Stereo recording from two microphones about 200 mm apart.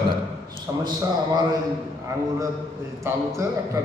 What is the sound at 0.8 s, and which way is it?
Speech, 20° right (ahead or behind).